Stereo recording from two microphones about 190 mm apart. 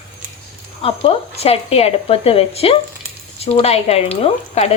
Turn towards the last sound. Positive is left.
turn(degrees=35)  # may be behind; listen again after turning